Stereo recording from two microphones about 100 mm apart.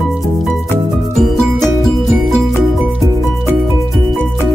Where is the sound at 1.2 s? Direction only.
Centre (ahead or behind).